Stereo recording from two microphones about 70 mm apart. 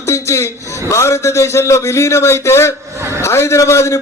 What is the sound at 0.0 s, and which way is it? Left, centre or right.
Speech, left.